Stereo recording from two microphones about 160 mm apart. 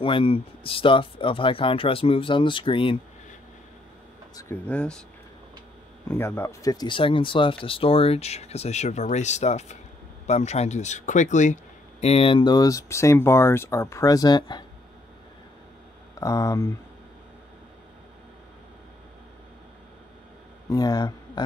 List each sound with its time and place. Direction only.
0.0 s speech: 35° left (ahead or behind)
4.4 s speech: 10° left (ahead or behind)
6.0 s speech: 15° left (ahead or behind)
16.2 s speech: 20° left (ahead or behind)
20.7 s speech: 25° left (ahead or behind)